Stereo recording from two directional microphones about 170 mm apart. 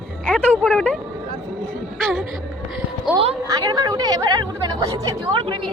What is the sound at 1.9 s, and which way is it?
Speech, centre (ahead or behind).